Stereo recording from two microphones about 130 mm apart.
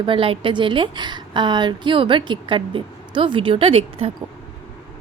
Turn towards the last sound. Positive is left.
turn(degrees=-50)  # may be behind; listen again after turning